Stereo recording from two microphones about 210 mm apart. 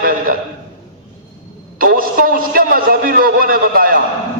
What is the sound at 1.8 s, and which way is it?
A man's voice, 45° right (ahead or behind).